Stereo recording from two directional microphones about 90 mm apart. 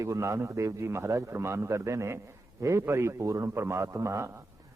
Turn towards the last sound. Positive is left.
turn(degrees=-35)  # may be behind; listen again after turning